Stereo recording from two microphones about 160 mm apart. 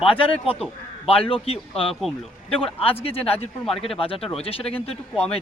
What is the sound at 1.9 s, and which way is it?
Speech, centre (ahead or behind).